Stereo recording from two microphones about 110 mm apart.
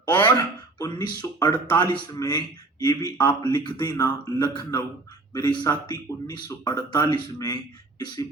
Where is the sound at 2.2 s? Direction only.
40° left (ahead or behind).